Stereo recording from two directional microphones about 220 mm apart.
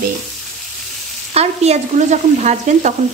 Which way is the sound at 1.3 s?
30° right (ahead or behind).